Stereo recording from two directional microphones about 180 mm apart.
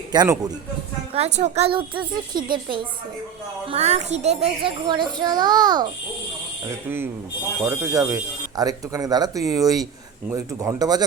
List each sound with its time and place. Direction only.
0.1 s a child's voice: 20° right (ahead or behind)
1.1 s a child's voice: 35° right (ahead or behind)
3.7 s a child's voice: 35° right (ahead or behind)
6.7 s a child's voice: 10° right (ahead or behind)